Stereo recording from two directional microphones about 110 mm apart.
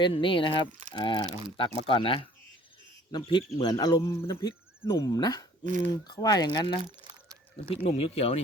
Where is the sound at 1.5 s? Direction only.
55° left (ahead or behind); by 4.0 s 40° left (ahead or behind).